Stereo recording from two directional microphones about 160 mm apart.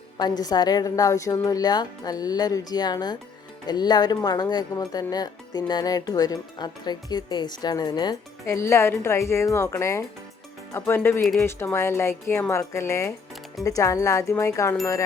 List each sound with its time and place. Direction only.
0.2 s speech: 25° left (ahead or behind)